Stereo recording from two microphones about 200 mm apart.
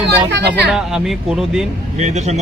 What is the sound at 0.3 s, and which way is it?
Speech, 60° right (ahead or behind).